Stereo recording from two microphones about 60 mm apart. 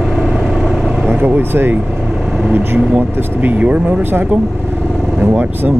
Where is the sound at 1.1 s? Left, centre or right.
Right.